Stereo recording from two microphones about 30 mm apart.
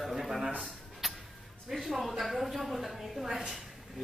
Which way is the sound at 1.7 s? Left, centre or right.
Centre.